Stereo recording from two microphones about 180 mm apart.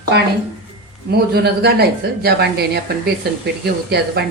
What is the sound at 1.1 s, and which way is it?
Speech, 65° right (ahead or behind).